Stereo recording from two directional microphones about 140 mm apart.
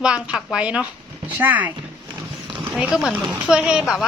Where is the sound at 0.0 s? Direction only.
5° right (ahead or behind).